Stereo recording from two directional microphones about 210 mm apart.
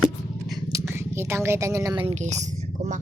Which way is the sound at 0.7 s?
10° right (ahead or behind).